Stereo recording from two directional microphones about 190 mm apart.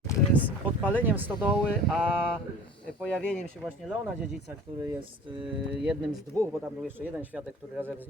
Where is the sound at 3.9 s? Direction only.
10° right (ahead or behind).